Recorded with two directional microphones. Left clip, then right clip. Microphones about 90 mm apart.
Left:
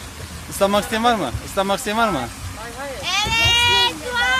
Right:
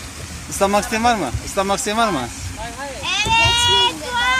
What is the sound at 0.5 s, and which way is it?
Speech, 5° left (ahead or behind).